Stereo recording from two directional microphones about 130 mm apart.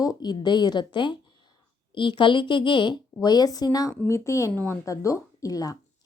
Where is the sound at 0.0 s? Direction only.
30° left (ahead or behind).